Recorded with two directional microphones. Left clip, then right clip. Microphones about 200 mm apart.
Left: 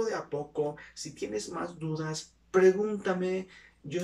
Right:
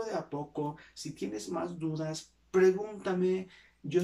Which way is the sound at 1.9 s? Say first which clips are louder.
Left 1 dB; 20° right (ahead or behind).